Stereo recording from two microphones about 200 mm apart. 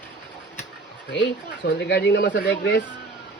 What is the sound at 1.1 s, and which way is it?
Speech, 60° left (ahead or behind).